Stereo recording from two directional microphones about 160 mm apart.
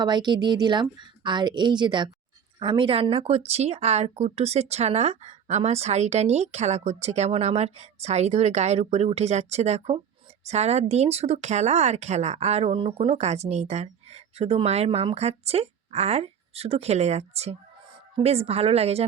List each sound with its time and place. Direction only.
0.0 s a woman's voice: 25° right (ahead or behind)